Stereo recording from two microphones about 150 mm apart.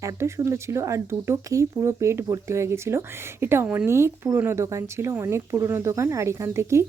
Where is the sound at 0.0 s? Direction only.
20° right (ahead or behind).